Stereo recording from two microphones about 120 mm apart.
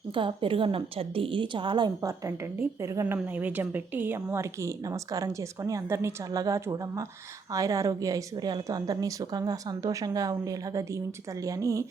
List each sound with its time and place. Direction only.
0.1 s a woman's voice: 45° right (ahead or behind)
2.0 s speech: 25° right (ahead or behind)
3.2 s speech: 15° right (ahead or behind)